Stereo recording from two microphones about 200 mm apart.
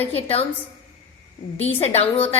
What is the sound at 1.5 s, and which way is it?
Speech, 30° left (ahead or behind).